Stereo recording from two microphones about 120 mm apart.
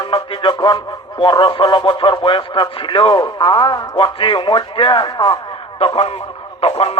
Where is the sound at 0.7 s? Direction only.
45° left (ahead or behind).